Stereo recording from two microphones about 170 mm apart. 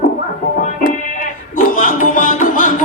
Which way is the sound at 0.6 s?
50° left (ahead or behind).